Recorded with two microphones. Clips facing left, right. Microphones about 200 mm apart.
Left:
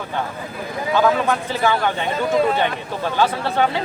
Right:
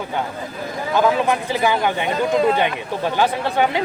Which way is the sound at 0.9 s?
15° right (ahead or behind).